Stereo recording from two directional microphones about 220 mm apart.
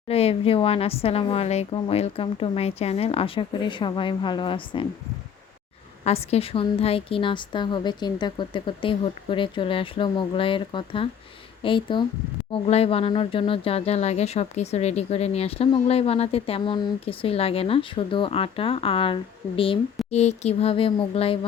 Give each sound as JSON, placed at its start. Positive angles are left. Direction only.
{"t": 0.1, "sound": "speech", "side_deg": 25}
{"t": 6.1, "sound": "speech", "side_deg": 30}